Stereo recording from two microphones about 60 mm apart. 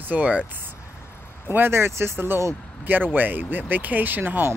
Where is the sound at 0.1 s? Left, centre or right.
Right.